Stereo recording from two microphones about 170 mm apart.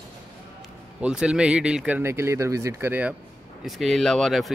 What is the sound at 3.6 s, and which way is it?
Speech, centre (ahead or behind).